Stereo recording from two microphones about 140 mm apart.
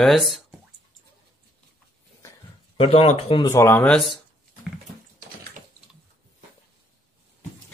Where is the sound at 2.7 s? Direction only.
45° left (ahead or behind).